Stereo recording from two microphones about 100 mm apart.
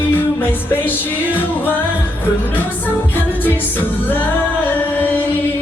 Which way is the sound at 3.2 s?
20° left (ahead or behind).